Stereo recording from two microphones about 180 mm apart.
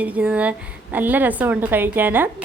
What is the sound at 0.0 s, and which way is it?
A woman's voice, 10° right (ahead or behind).